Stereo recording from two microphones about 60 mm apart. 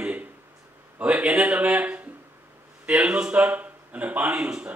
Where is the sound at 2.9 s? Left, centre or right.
Centre.